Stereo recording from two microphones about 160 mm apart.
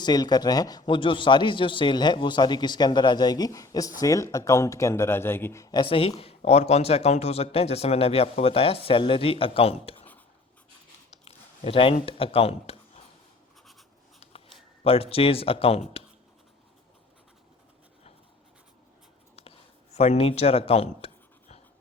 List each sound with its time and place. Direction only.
0.0 s a man's voice: 25° left (ahead or behind)
5.8 s a man's voice: 35° left (ahead or behind)
11.3 s a sound: 35° left (ahead or behind)
12.0 s speech: 35° left (ahead or behind)
14.2 s a sound: 35° left (ahead or behind)
14.8 s a man's voice: 40° left (ahead or behind)
19.4 s speech: 40° left (ahead or behind)